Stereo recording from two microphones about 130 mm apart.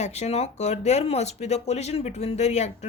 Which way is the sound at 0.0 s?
55° left (ahead or behind).